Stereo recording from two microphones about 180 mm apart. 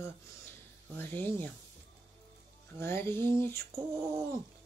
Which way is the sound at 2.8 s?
15° left (ahead or behind).